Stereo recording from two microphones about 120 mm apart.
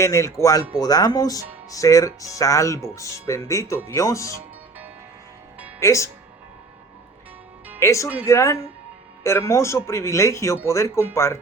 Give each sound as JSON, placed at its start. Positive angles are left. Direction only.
{"t": 0.0, "sound": "speech", "side_deg": 25}
{"t": 5.8, "sound": "speech", "side_deg": 25}
{"t": 7.8, "sound": "speech", "side_deg": 25}